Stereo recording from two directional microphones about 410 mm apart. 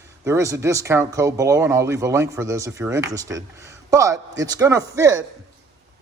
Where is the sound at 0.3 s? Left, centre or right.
Centre.